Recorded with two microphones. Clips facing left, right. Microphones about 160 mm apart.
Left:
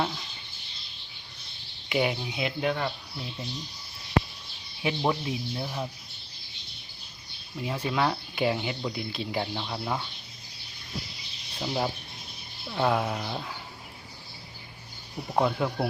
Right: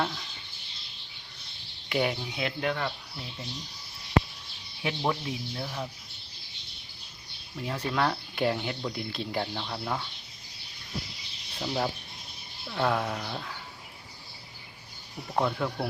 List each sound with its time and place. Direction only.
0.0 s a sound: 10° left (ahead or behind)
1.9 s speech: 5° left (ahead or behind)
4.8 s speech: 20° left (ahead or behind)
7.6 s speech: 10° left (ahead or behind)
11.6 s speech: 10° left (ahead or behind)
15.3 s speech: 10° left (ahead or behind)